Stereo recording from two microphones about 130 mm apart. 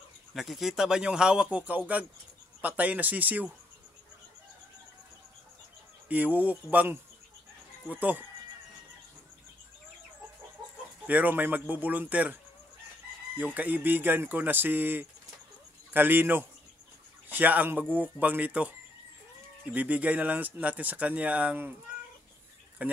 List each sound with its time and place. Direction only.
0.3 s speech: centre (ahead or behind)
6.0 s speech: 10° right (ahead or behind)
11.1 s speech: 10° right (ahead or behind)
13.6 s speech: 15° right (ahead or behind)
19.7 s speech: 10° right (ahead or behind)
22.8 s speech: 10° right (ahead or behind)